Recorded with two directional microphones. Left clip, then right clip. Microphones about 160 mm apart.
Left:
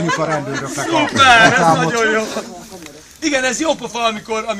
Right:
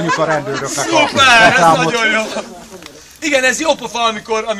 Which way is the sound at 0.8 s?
40° right (ahead or behind).